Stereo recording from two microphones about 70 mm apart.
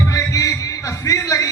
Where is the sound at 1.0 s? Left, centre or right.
Left.